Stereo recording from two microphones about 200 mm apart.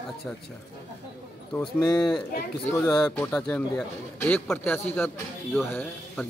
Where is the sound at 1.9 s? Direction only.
10° left (ahead or behind).